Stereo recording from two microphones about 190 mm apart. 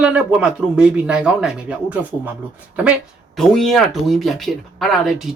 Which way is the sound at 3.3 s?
Centre (ahead or behind).